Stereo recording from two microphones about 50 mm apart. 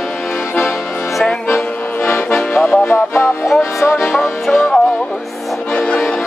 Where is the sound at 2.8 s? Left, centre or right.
Left.